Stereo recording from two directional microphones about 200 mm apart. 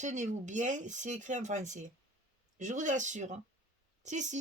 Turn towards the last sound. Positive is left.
turn(degrees=-35)  # may be behind; listen again after turning